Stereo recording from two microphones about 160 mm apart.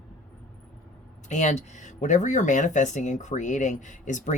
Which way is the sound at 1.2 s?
50° left (ahead or behind).